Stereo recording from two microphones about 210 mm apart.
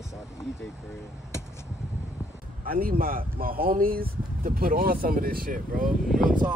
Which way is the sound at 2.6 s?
45° right (ahead or behind).